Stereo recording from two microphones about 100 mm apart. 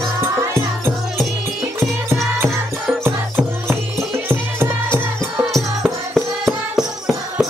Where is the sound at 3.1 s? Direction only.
20° right (ahead or behind).